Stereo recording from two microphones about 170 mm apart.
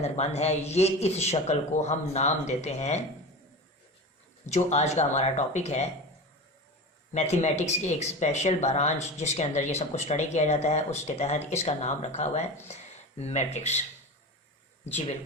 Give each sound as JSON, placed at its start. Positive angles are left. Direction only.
{"t": 0.0, "sound": "speech", "side_deg": 40}
{"t": 4.4, "sound": "speech", "side_deg": 40}
{"t": 7.1, "sound": "speech", "side_deg": 40}
{"t": 14.8, "sound": "speech", "side_deg": 40}